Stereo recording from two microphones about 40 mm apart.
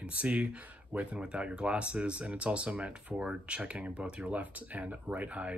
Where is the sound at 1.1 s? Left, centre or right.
Right.